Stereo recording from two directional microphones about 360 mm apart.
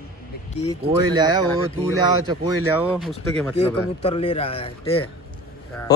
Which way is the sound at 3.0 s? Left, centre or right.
Centre.